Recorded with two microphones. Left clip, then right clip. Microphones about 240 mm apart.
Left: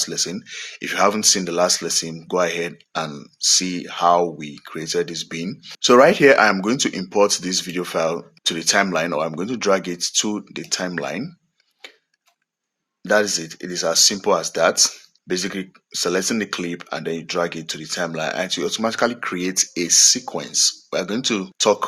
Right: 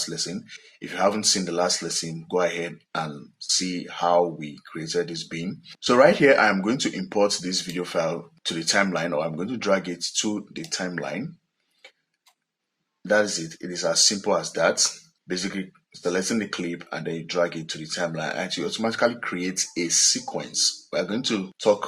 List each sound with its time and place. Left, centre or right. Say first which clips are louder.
0.0 s speech: left 6 dB; left
13.1 s speech: left 3 dB; left